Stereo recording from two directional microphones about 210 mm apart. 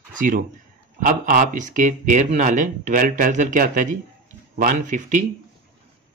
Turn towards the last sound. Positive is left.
turn(degrees=-35)  # may be behind; listen again after turning